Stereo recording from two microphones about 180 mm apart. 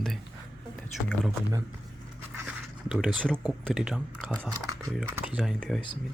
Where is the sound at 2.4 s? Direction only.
5° right (ahead or behind).